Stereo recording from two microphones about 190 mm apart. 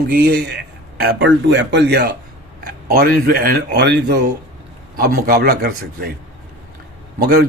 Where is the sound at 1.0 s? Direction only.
80° right; by 6.1 s 55° right (ahead or behind).